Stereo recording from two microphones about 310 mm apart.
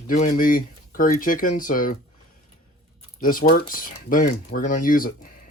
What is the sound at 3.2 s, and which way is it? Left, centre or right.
Speech, left.